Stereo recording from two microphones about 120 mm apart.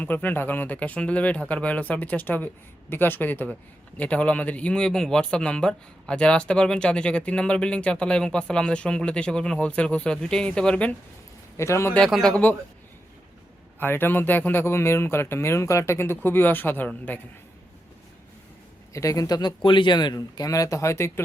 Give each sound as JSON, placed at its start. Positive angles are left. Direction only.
{"t": 0.0, "sound": "a man's voice", "side_deg": 15}
{"t": 11.5, "sound": "speech", "side_deg": 25}
{"t": 11.9, "sound": "speech", "side_deg": 5}
{"t": 13.7, "sound": "a man's voice", "side_deg": 20}
{"t": 18.9, "sound": "speech", "side_deg": 30}